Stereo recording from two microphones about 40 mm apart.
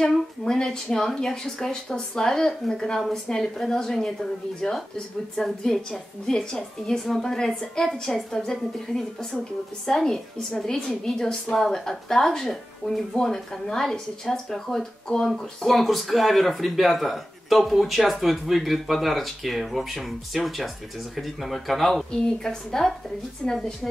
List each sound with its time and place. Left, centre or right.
0.0 s speech: left
15.3 s speech: centre
22.1 s speech: centre